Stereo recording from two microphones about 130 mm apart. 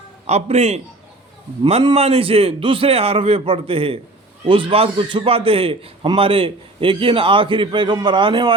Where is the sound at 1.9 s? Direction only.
50° right (ahead or behind).